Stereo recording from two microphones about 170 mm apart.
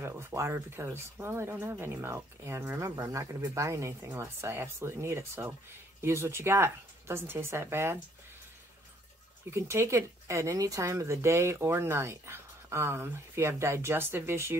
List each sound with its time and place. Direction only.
0.0 s speech: 15° right (ahead or behind)
9.5 s speech: 15° right (ahead or behind)